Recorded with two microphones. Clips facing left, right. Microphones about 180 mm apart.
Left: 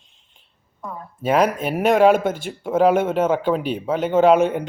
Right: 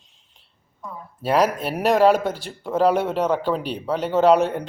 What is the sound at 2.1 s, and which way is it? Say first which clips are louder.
Speech: left 3 dB; 35° right (ahead or behind).